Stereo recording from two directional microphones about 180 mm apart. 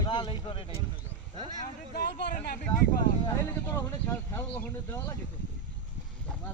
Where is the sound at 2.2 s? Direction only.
65° left (ahead or behind).